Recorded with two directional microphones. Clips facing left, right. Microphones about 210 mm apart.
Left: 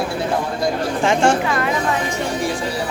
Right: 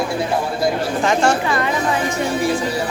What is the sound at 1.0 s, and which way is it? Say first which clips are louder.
Speech: left 1 dB; 30° left (ahead or behind).